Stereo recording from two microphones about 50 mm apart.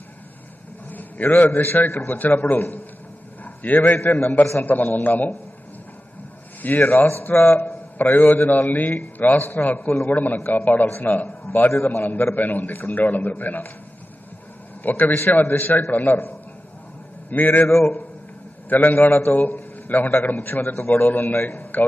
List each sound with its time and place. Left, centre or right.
0.8 s a man's voice: left
6.6 s a man's voice: left
11.2 s a man's voice: left
12.0 s a man's voice: left
14.8 s a man's voice: left
17.3 s a man's voice: left
17.6 s a man's voice: left
18.7 s a man's voice: left